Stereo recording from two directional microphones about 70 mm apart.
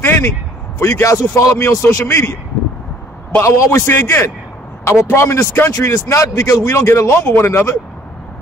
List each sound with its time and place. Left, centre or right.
0.0 s a sound: left
0.7 s a man's voice: left
3.3 s a man's voice: left